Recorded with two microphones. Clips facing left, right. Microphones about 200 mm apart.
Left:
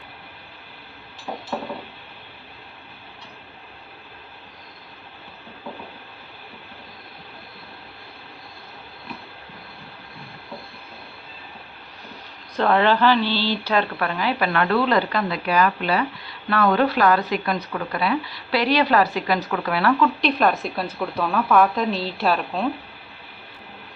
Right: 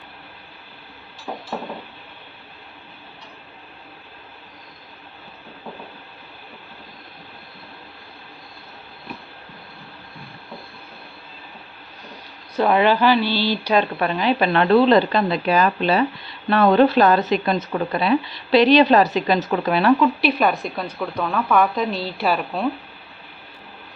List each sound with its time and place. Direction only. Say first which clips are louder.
12.5 s speech: right 2 dB; 10° right (ahead or behind)
20.2 s a woman's voice: right 1 dB; centre (ahead or behind)